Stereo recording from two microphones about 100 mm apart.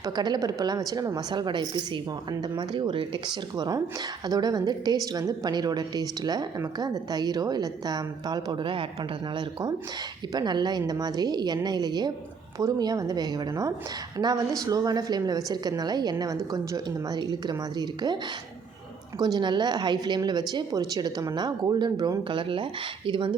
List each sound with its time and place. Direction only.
0.0 s a woman's voice: 40° right (ahead or behind)
3.5 s a woman's voice: 40° right (ahead or behind)
19.2 s a woman's voice: 45° right (ahead or behind)